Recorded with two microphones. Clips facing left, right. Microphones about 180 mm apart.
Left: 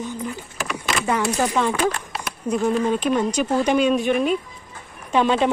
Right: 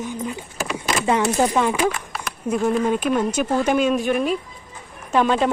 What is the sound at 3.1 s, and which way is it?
Speech, 5° right (ahead or behind).